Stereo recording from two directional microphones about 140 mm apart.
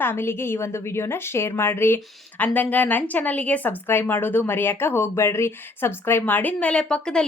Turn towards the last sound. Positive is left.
turn(degrees=5)  # may be behind; listen again after turning